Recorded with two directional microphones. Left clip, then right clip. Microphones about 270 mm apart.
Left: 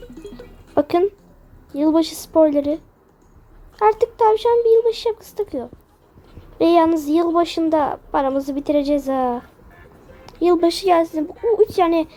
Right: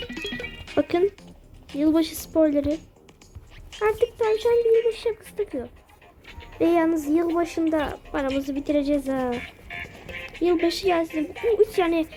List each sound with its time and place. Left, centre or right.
0.0 s music: right
0.8 s a woman's voice: centre
3.8 s a woman's voice: centre